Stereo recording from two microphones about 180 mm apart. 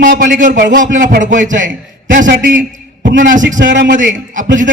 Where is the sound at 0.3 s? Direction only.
50° right (ahead or behind).